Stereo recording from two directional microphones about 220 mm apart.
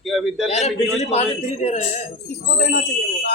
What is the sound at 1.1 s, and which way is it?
Speech, 30° left (ahead or behind).